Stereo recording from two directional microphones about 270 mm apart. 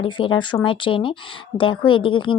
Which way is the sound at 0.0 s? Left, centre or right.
Centre.